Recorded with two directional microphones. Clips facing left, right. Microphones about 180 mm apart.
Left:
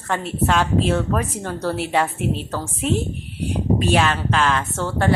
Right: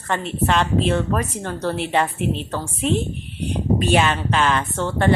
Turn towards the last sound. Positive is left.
turn(degrees=5)  # may be behind; listen again after turning